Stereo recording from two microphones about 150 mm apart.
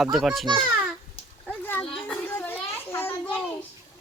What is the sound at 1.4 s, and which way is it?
Children playing, 10° left (ahead or behind).